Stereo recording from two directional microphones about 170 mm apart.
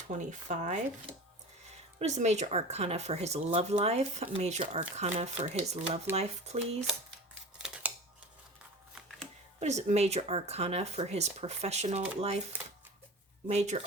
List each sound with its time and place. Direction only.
0.3 s speech: 45° right (ahead or behind)
2.0 s speech: 40° right (ahead or behind)
7.6 s a sound: 10° right (ahead or behind)
9.6 s speech: 40° right (ahead or behind)
13.5 s speech: 40° right (ahead or behind)